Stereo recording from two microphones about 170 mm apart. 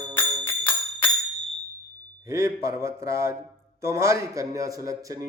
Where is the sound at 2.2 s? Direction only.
15° right (ahead or behind).